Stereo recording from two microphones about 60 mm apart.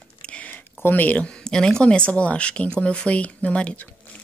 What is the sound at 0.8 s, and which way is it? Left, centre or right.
A woman's voice, left.